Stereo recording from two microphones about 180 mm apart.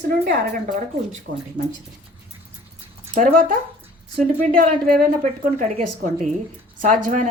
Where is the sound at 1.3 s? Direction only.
90° right.